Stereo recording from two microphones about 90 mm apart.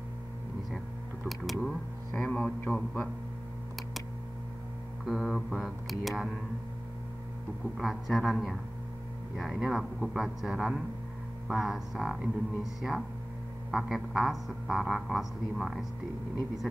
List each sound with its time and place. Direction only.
1.4 s speech: centre (ahead or behind)
2.2 s a man's voice: 10° left (ahead or behind)
5.0 s speech: 5° right (ahead or behind)
7.7 s speech: centre (ahead or behind)